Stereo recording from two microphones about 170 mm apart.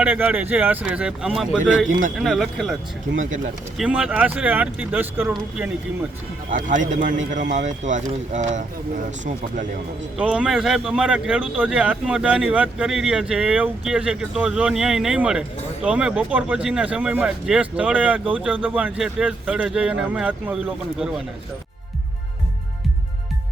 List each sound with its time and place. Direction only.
0.0 s speech: 10° right (ahead or behind)
3.2 s speech: 50° right (ahead or behind)
3.8 s speech: 5° right (ahead or behind)
6.5 s speech: 50° right (ahead or behind)
10.2 s speech: 5° right (ahead or behind)